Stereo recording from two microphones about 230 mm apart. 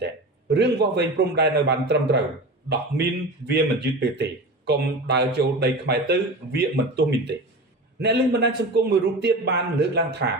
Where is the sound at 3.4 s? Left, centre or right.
Right.